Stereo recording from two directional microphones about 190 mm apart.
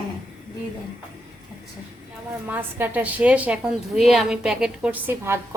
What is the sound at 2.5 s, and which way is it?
A woman's voice, 10° right (ahead or behind).